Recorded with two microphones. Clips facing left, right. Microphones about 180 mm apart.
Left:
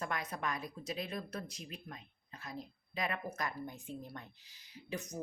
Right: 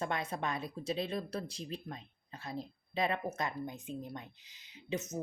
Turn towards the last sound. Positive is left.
turn(degrees=-20)  # may be behind; listen again after turning